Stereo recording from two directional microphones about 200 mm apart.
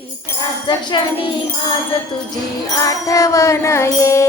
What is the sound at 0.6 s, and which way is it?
Jingle bell, 20° left (ahead or behind).